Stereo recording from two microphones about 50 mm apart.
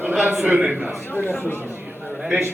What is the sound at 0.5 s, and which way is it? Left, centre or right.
Speech, right.